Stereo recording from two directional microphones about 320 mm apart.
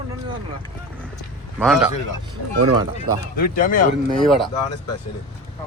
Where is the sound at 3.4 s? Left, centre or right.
Left.